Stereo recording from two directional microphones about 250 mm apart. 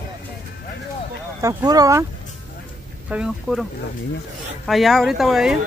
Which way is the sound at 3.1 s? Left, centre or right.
Centre.